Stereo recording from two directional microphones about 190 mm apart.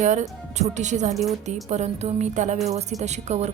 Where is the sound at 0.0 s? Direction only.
40° right (ahead or behind).